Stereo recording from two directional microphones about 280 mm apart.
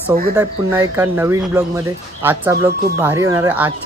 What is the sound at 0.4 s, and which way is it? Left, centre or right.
Speech, centre.